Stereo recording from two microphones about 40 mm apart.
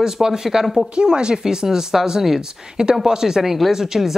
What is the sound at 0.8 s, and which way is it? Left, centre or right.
Speech, right.